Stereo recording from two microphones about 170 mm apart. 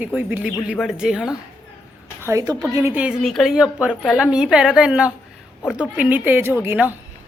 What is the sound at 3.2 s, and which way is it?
A woman's voice, centre (ahead or behind).